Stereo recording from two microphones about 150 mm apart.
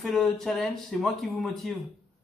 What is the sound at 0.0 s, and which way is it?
A man's voice, centre (ahead or behind).